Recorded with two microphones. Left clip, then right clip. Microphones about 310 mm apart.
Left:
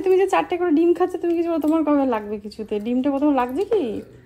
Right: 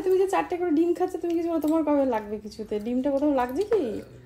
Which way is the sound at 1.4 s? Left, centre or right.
Left.